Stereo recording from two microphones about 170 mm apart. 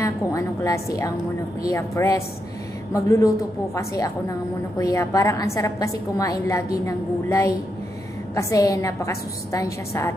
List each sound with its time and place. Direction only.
0.0 s a woman's voice: 20° left (ahead or behind)